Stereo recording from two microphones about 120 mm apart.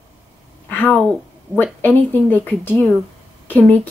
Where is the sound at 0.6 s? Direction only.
15° left (ahead or behind).